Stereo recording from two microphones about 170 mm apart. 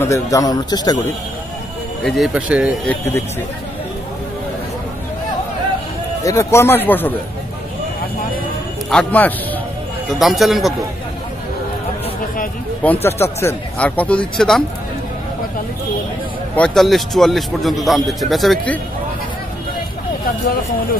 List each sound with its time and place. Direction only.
0.0 s speech: 20° left (ahead or behind)
2.0 s a man's voice: centre (ahead or behind)
2.9 s speech: 15° left (ahead or behind)
6.2 s speech: 15° left (ahead or behind)
8.9 s speech: 10° left (ahead or behind)
10.1 s a man's voice: centre (ahead or behind)
12.8 s speech: 10° left (ahead or behind)
16.5 s a man's voice: 5° left (ahead or behind)